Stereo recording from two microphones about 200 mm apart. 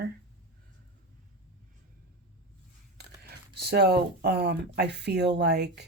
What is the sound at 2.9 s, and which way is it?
Speech, 55° right (ahead or behind).